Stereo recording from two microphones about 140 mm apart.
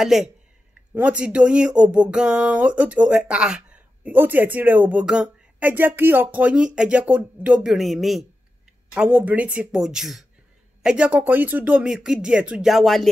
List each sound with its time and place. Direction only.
0.0 s speech: centre (ahead or behind)